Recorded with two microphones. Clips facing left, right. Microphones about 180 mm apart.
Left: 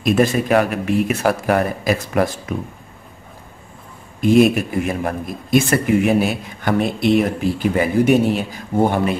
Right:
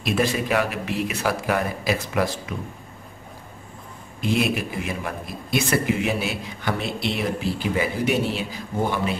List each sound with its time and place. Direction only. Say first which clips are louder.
0.0 s a man's voice: left 7 dB; 50° left (ahead or behind)
4.2 s a man's voice: left 10 dB; 45° left (ahead or behind)